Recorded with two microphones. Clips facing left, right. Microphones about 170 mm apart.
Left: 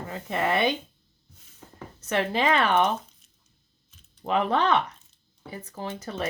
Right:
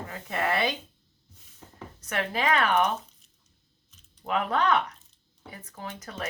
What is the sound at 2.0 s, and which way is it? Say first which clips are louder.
Speech: left 3 dB; 30° left (ahead or behind).